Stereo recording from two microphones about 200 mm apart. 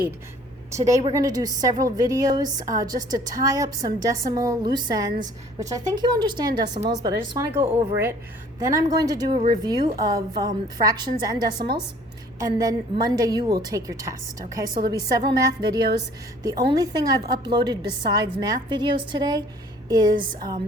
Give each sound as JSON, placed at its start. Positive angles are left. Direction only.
{"t": 1.1, "sound": "a woman's voice", "side_deg": -15}